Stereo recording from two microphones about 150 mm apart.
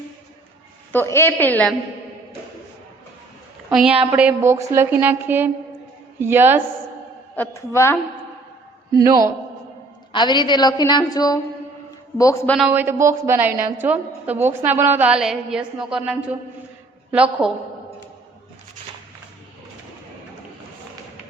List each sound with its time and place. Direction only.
0.9 s a woman's voice: 15° left (ahead or behind)
3.7 s a woman's voice: 5° right (ahead or behind)
7.3 s a woman's voice: 20° left (ahead or behind)
8.9 s a man's voice: 25° right (ahead or behind)
10.1 s a woman's voice: 30° left (ahead or behind)
12.5 s a man's voice: centre (ahead or behind)
12.7 s a woman's voice: 15° right (ahead or behind)